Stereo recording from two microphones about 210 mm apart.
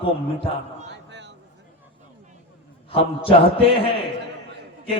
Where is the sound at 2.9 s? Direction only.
25° left (ahead or behind).